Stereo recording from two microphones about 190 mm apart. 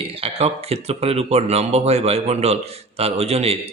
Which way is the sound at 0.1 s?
30° right (ahead or behind).